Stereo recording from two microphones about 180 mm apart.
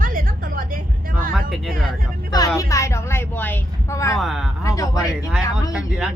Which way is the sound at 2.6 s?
15° left (ahead or behind).